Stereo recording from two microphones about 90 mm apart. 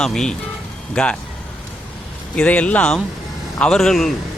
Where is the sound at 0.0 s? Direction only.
5° left (ahead or behind).